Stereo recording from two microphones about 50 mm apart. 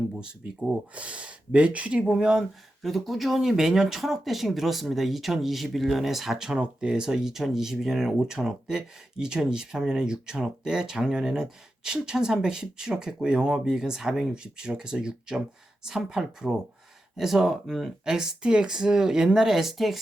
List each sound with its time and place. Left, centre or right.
0.2 s speech: centre
2.8 s speech: centre
6.6 s speech: centre